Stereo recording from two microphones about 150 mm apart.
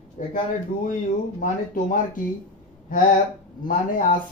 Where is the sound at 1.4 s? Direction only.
65° left (ahead or behind).